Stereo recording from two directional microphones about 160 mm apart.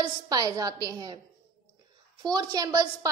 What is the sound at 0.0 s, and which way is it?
A woman's voice, 25° right (ahead or behind).